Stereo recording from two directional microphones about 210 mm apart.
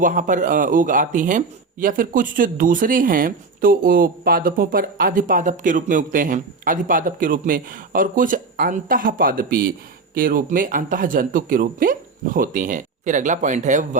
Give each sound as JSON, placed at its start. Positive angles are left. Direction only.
{"t": 0.0, "sound": "speech", "side_deg": -40}